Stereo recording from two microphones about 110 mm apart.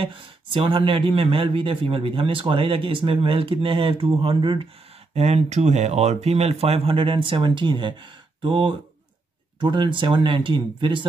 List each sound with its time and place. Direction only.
0.0 s speech: 55° right (ahead or behind)
5.1 s speech: 75° right (ahead or behind); by 11.1 s 50° right (ahead or behind)